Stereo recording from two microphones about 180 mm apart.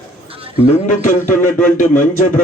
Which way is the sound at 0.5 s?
40° left (ahead or behind).